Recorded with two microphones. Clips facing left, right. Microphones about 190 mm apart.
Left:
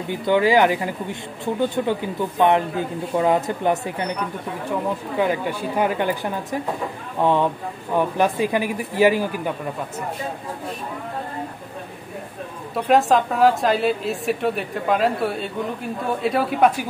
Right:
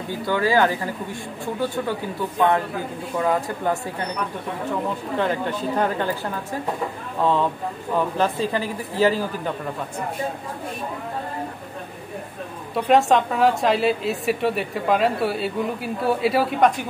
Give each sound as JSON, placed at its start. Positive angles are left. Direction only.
{"t": 0.1, "sound": "a man's voice", "side_deg": 20}
{"t": 5.1, "sound": "a man's voice", "side_deg": 10}
{"t": 12.7, "sound": "a woman's voice", "side_deg": 0}